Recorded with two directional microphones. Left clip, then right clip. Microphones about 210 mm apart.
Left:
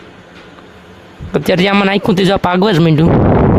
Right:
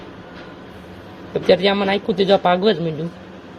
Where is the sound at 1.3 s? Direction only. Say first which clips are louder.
Left 4 dB; 45° left (ahead or behind).